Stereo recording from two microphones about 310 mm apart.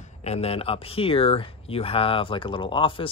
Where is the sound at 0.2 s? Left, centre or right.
Centre.